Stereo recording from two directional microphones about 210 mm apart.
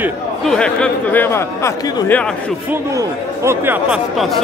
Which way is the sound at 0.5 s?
5° left (ahead or behind).